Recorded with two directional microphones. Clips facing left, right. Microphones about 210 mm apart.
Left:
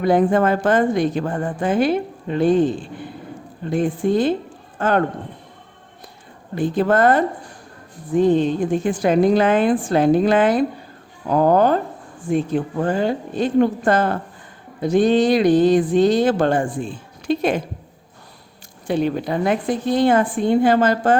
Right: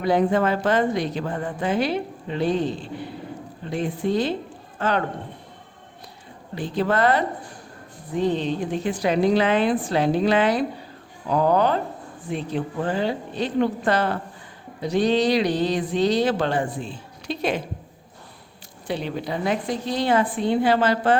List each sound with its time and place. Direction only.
0.0 s speech: 50° left (ahead or behind)
6.6 s speech: 50° left (ahead or behind)
18.9 s speech: 50° left (ahead or behind)